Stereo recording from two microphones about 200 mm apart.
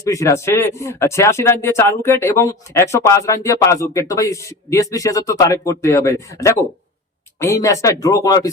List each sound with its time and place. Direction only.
0.0 s speech: 15° left (ahead or behind)